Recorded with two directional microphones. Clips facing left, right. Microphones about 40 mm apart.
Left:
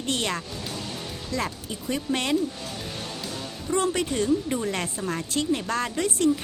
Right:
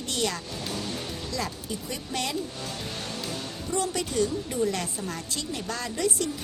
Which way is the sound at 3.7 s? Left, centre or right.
Left.